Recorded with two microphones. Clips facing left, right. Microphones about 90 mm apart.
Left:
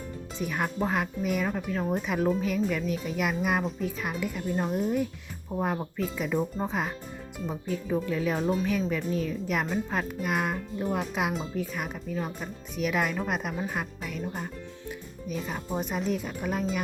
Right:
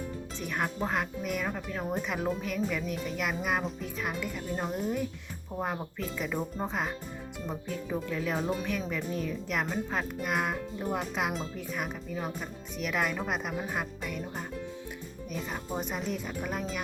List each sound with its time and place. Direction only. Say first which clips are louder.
0.3 s speech: left 3 dB; 5° left (ahead or behind)